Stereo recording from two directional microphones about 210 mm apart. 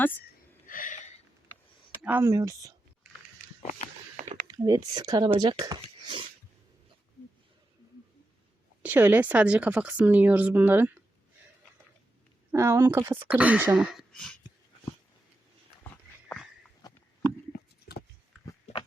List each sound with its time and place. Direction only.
0.7 s a sound: 40° left (ahead or behind)
2.0 s speech: 10° right (ahead or behind)
3.6 s walk: 30° left (ahead or behind)
4.3 s speech: 15° right (ahead or behind)
8.8 s speech: 10° right (ahead or behind)
12.5 s speech: 10° right (ahead or behind)
18.6 s pig: 25° left (ahead or behind)